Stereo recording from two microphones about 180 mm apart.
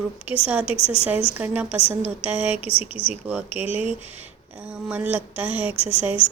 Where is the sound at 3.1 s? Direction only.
10° right (ahead or behind).